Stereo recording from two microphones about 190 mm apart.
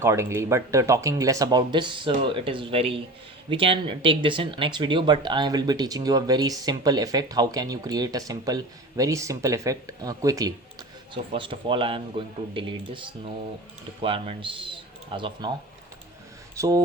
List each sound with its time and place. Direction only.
0.0 s a man's voice: 15° right (ahead or behind)
16.6 s speech: 15° right (ahead or behind)